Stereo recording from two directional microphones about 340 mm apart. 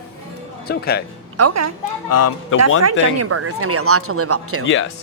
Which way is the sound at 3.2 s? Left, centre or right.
Right.